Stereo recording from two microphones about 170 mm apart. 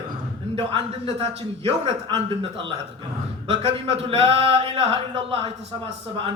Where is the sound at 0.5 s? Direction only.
35° right (ahead or behind).